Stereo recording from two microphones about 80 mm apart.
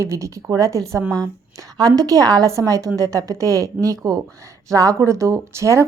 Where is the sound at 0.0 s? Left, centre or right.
Right.